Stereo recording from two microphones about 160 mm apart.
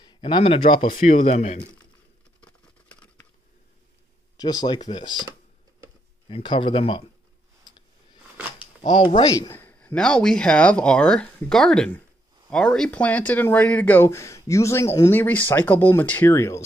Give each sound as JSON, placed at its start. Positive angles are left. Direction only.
{"t": 0.0, "sound": "speech", "side_deg": 30}
{"t": 4.4, "sound": "speech", "side_deg": 25}
{"t": 6.2, "sound": "speech", "side_deg": 30}
{"t": 8.5, "sound": "speech", "side_deg": 30}